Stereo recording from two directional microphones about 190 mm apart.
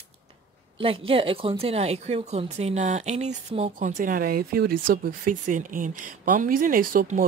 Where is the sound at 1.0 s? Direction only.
30° right (ahead or behind).